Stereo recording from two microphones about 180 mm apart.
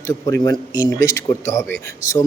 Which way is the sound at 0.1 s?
15° left (ahead or behind).